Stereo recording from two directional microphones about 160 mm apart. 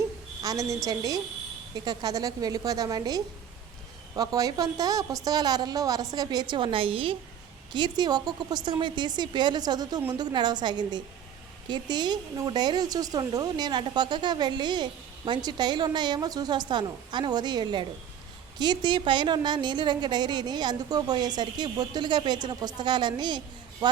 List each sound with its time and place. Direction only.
0.4 s speech: 20° right (ahead or behind)